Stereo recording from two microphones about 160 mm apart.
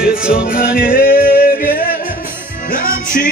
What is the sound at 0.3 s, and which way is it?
Music, 65° left (ahead or behind).